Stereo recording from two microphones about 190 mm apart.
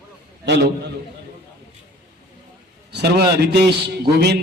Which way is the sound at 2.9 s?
60° right (ahead or behind).